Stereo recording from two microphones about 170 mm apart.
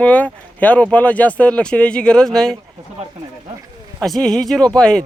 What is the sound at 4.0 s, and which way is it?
Speech, centre (ahead or behind).